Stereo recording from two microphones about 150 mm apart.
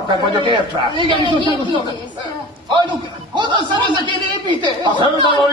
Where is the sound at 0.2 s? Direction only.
30° right (ahead or behind).